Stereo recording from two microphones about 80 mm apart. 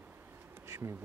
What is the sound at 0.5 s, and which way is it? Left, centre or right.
Bee, right.